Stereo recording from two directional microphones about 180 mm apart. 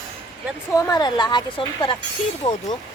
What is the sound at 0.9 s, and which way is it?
A woman's voice, 25° left (ahead or behind).